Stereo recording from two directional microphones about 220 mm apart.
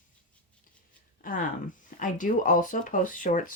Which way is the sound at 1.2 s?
40° left (ahead or behind).